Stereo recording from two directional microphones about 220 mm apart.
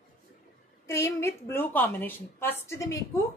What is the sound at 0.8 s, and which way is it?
Speech, 15° left (ahead or behind).